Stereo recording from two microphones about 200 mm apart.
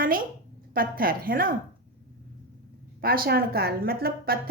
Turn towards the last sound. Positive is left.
turn(degrees=-50)  # may be behind; listen again after turning